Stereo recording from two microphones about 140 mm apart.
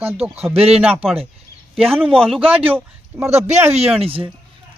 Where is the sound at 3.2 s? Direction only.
50° right (ahead or behind).